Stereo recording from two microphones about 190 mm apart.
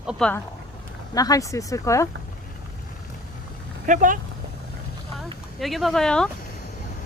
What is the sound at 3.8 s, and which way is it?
Speech, 45° right (ahead or behind).